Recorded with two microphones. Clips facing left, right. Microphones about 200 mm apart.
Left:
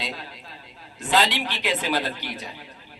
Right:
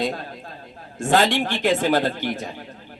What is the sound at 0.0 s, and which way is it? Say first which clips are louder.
A man's voice: right 9 dB; 50° right (ahead or behind).